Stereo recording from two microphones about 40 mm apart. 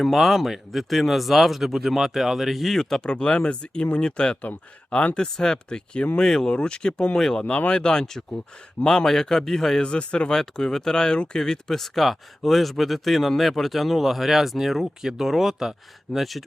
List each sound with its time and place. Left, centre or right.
0.0 s speech: centre
3.0 s speech: left
7.4 s speech: left
9.0 s speech: centre
9.8 s speech: left
10.3 s speech: centre
11.8 s speech: centre